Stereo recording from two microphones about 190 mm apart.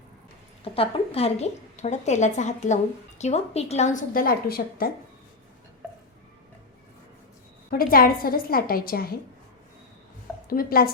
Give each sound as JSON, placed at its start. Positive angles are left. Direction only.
{"t": 0.6, "sound": "a woman's voice", "side_deg": 30}
{"t": 7.7, "sound": "a woman's voice", "side_deg": 50}
{"t": 10.5, "sound": "a woman's voice", "side_deg": 50}